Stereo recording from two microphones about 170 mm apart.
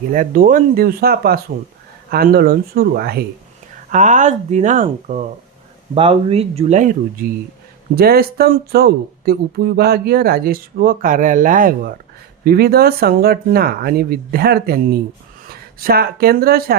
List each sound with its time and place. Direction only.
0.1 s speech: 55° right (ahead or behind)
3.8 s speech: 50° right (ahead or behind)
5.9 s speech: 30° right (ahead or behind); by 7.3 s 45° right (ahead or behind)
7.9 s speech: 65° right (ahead or behind)
12.5 s speech: 65° right (ahead or behind)